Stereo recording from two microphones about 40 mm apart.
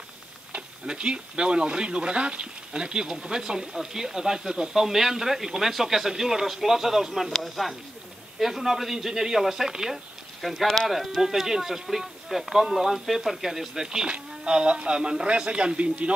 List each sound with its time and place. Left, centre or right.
0.5 s speech: right